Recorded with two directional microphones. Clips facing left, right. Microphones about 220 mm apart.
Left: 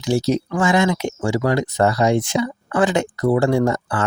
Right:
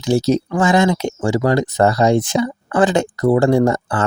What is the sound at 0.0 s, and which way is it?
Speech, 45° right (ahead or behind).